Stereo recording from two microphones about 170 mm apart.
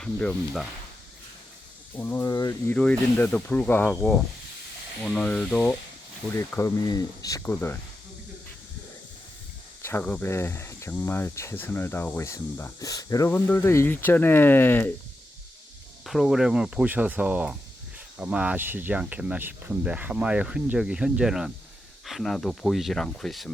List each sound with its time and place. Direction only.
0.0 s speech: 5° left (ahead or behind)
2.0 s speech: 15° left (ahead or behind)
2.7 s speech: 5° left (ahead or behind)
6.3 s speech: 15° left (ahead or behind)
9.8 s speech: 10° left (ahead or behind)
16.0 s speech: centre (ahead or behind)